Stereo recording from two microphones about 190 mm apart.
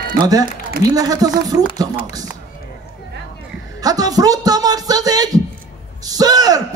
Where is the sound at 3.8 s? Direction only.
20° right (ahead or behind).